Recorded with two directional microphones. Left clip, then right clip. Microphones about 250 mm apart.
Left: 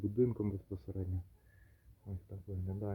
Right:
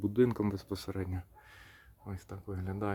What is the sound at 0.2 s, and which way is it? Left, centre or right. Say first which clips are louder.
Speech: right 5 dB; centre.